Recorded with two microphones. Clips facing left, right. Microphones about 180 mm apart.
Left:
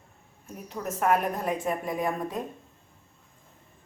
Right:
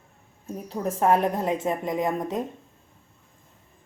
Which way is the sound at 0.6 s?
30° right (ahead or behind).